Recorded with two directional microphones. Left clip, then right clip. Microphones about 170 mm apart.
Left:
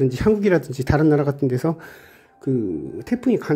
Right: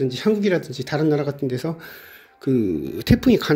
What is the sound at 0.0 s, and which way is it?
Speech, 20° left (ahead or behind).